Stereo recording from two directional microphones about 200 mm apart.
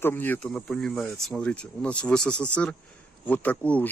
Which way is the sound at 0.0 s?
10° left (ahead or behind).